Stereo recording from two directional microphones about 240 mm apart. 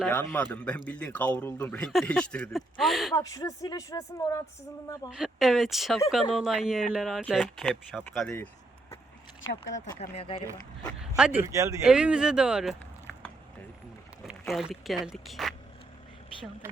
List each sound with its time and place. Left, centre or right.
0.0 s speech: centre
3.2 s speech: centre
5.1 s speech: centre
9.7 s speech: left
11.2 s speech: centre
13.1 s a sound: centre
14.3 s speech: centre